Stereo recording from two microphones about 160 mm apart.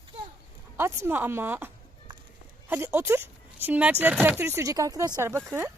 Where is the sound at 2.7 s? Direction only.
15° right (ahead or behind).